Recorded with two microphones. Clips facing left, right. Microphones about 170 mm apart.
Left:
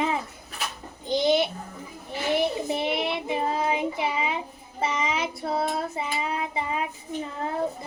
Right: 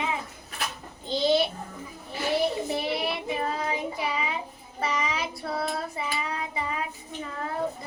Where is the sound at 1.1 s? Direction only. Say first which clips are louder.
Left 1 dB; 20° left (ahead or behind).